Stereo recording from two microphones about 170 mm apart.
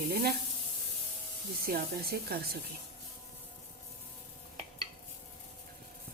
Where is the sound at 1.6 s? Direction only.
65° right (ahead or behind).